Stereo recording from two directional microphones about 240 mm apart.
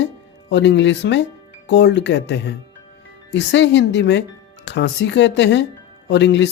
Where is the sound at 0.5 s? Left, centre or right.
Left.